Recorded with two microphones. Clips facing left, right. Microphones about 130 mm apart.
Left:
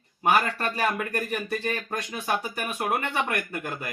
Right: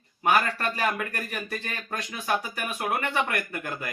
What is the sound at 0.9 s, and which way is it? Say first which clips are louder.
Speech: left 4 dB; 15° left (ahead or behind).